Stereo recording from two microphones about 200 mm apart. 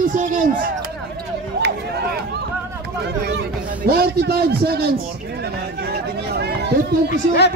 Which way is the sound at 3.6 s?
50° right (ahead or behind).